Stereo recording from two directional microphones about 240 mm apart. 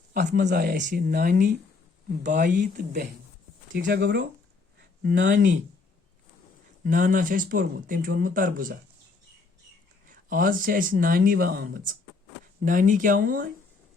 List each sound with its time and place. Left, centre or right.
0.1 s speech: right
6.8 s speech: right
10.1 s speech: right